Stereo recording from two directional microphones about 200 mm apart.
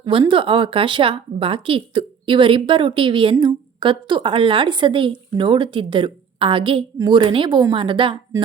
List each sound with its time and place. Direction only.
0.0 s speech: 25° right (ahead or behind)